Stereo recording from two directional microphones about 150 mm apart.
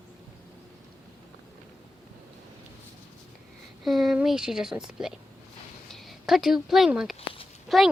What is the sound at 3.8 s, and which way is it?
A woman's voice, centre (ahead or behind).